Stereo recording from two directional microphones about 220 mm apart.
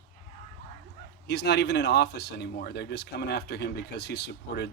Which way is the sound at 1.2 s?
50° left (ahead or behind).